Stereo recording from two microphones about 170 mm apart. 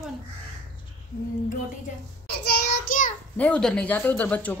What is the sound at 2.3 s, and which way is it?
Child singing, 75° left (ahead or behind).